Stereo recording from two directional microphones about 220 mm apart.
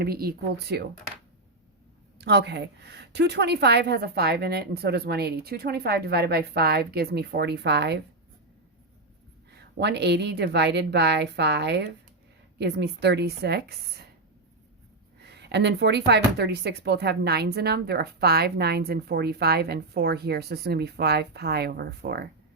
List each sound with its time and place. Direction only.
0.0 s speech: 45° right (ahead or behind)
2.1 s speech: 50° right (ahead or behind)
9.6 s speech: 50° right (ahead or behind)
15.2 s speech: 50° right (ahead or behind)